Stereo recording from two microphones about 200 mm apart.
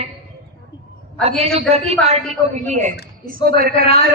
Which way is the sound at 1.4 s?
30° right (ahead or behind).